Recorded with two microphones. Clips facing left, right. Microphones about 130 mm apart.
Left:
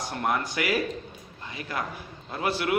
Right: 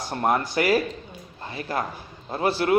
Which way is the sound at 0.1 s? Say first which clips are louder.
Right 6 dB; 35° right (ahead or behind).